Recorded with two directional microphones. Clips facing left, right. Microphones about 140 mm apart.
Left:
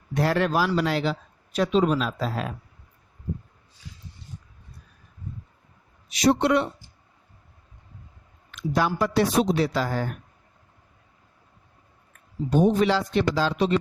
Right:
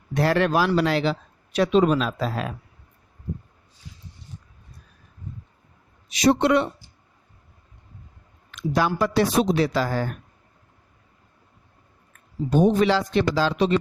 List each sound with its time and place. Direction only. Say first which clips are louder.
0.1 s speech: right 2 dB; 80° right
1.5 s speech: right 3 dB; 75° right (ahead or behind); by 2.5 s 90° right
6.1 s speech: right 2 dB; 90° right
8.7 s speech: right 1 dB; 90° right
12.5 s speech: right 2 dB; 90° right